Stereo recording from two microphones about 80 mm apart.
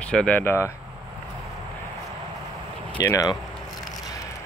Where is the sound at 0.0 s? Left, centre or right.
Centre.